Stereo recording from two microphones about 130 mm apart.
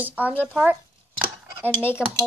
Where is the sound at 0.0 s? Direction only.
15° right (ahead or behind).